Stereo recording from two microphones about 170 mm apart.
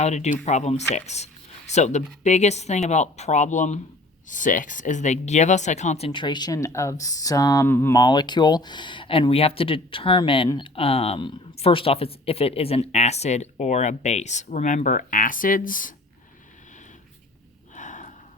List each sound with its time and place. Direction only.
0.0 s speech: 40° left (ahead or behind)
6.1 s speech: 30° left (ahead or behind); by 16.0 s 50° left (ahead or behind)
17.7 s gasp: 45° left (ahead or behind)